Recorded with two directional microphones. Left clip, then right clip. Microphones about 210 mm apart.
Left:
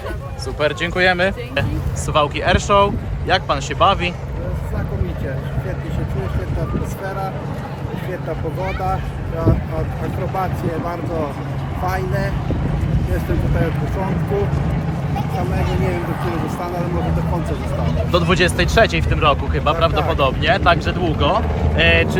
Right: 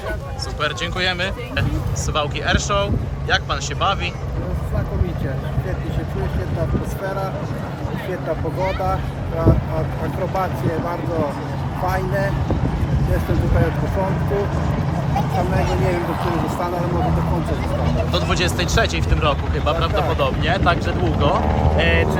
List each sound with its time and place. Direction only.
0.6 s speech: 35° left (ahead or behind)
10.3 s speech: 5° right (ahead or behind)
15.9 s speech: 10° right (ahead or behind)
18.1 s speech: 40° left (ahead or behind)